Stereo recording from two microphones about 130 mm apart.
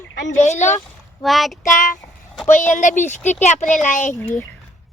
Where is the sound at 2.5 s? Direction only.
80° left.